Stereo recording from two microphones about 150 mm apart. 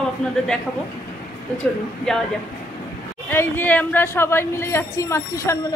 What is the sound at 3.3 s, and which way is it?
A woman's voice, 15° left (ahead or behind).